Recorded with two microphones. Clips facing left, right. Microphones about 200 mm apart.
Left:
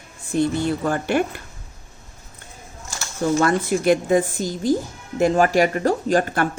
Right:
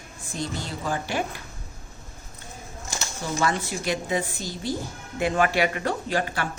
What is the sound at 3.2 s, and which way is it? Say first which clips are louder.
Speech: left 8 dB; 55° left (ahead or behind).